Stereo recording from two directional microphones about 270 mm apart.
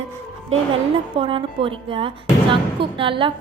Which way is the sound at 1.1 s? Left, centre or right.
Centre.